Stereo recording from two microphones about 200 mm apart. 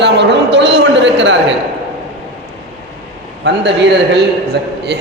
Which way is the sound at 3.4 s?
60° right (ahead or behind).